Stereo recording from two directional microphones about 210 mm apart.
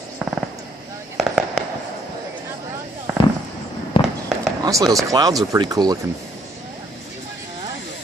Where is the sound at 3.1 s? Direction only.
5° right (ahead or behind).